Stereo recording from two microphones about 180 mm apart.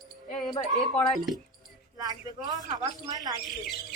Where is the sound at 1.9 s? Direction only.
20° right (ahead or behind).